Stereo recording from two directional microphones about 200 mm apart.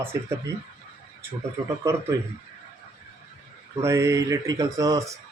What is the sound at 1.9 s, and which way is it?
Speech, 15° right (ahead or behind).